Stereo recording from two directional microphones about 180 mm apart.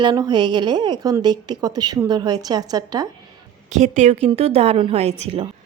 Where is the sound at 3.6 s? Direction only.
40° right (ahead or behind).